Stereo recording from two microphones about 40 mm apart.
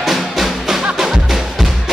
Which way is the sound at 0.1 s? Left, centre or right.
Centre.